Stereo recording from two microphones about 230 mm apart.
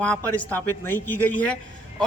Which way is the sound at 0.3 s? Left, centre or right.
Centre.